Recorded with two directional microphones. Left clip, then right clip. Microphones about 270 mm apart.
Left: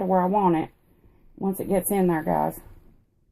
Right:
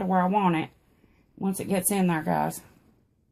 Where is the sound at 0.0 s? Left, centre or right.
Right.